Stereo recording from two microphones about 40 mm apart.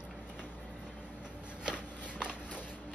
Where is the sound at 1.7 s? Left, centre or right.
Right.